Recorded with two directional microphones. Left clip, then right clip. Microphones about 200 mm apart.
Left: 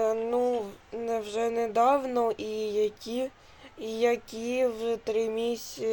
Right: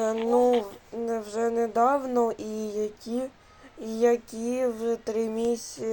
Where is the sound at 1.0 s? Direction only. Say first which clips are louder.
Right 1 dB; 10° right (ahead or behind).